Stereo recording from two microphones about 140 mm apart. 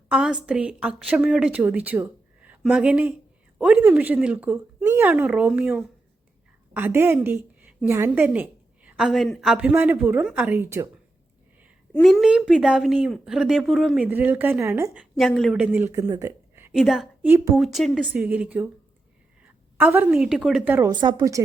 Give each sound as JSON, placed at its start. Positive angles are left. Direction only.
{"t": 0.1, "sound": "a woman's voice", "side_deg": -5}
{"t": 7.2, "sound": "a sound", "side_deg": -10}
{"t": 7.9, "sound": "a woman's voice", "side_deg": -15}
{"t": 12.2, "sound": "speech", "side_deg": -5}
{"t": 14.1, "sound": "a woman's voice", "side_deg": -15}
{"t": 16.7, "sound": "speech", "side_deg": 0}
{"t": 17.2, "sound": "speech", "side_deg": -20}
{"t": 17.6, "sound": "speech", "side_deg": 0}
{"t": 18.1, "sound": "a woman's voice", "side_deg": -10}
{"t": 19.7, "sound": "a woman's voice", "side_deg": -15}
{"t": 20.9, "sound": "speech", "side_deg": -35}